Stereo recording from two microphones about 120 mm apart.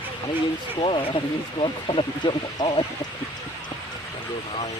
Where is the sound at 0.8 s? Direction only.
50° left (ahead or behind).